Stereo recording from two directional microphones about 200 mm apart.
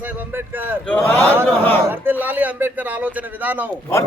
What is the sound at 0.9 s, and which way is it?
Speech, 5° left (ahead or behind).